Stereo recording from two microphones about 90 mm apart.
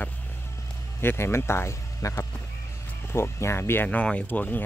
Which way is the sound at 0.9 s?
30° left (ahead or behind).